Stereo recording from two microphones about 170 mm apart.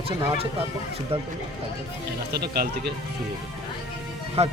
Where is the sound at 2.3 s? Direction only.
70° right (ahead or behind).